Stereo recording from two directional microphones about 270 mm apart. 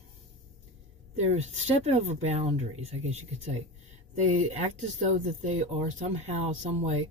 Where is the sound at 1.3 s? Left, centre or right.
Right.